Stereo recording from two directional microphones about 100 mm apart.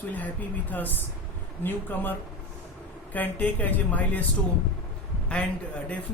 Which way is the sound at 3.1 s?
15° left (ahead or behind).